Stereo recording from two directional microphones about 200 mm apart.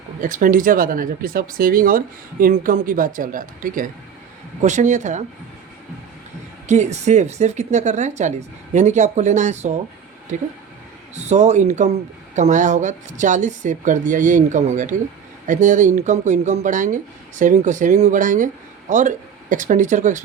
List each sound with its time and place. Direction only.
0.2 s speech: 40° right (ahead or behind)
6.7 s speech: 35° right (ahead or behind)
11.1 s speech: 35° right (ahead or behind)